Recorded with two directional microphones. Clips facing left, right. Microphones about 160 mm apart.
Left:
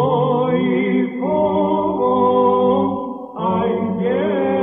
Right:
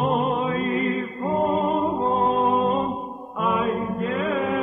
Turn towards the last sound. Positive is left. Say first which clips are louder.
# left 7 dB
turn(degrees=35)  # may be behind; listen again after turning